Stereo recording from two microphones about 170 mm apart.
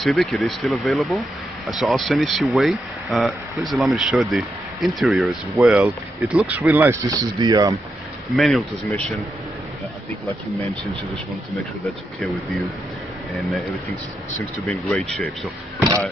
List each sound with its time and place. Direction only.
0.0 s speech: centre (ahead or behind); by 7.7 s 25° right (ahead or behind)
8.4 s speech: centre (ahead or behind)
13.3 s speech: centre (ahead or behind)
14.7 s speech: centre (ahead or behind)